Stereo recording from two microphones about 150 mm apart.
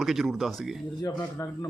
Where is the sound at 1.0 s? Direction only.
20° left (ahead or behind).